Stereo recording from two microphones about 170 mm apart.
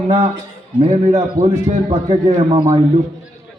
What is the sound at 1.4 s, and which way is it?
A man's voice, 40° right (ahead or behind).